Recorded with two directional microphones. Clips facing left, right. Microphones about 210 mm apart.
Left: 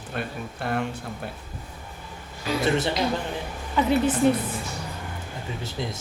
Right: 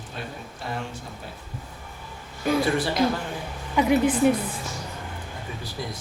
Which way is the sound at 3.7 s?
15° right (ahead or behind).